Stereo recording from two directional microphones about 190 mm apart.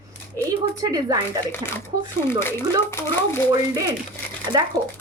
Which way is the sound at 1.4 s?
10° left (ahead or behind).